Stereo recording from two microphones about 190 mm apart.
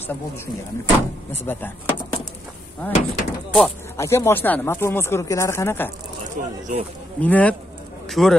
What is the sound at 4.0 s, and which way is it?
Speech, 15° left (ahead or behind).